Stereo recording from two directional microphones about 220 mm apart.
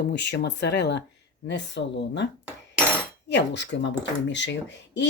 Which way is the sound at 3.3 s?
55° left (ahead or behind).